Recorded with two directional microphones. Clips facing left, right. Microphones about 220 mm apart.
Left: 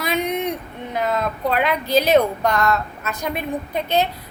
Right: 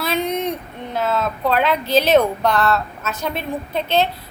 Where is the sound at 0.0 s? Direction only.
15° left (ahead or behind).